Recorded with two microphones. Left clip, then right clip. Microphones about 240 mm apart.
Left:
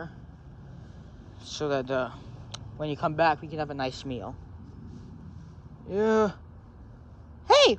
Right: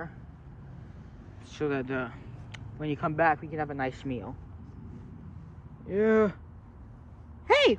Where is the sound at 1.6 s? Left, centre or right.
Centre.